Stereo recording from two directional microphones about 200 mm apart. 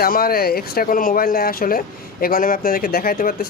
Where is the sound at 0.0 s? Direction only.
50° left (ahead or behind).